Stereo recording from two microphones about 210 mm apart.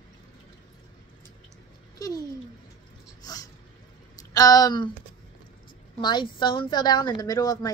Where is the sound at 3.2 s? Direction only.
20° left (ahead or behind).